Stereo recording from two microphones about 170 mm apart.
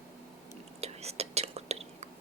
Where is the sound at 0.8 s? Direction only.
40° right (ahead or behind).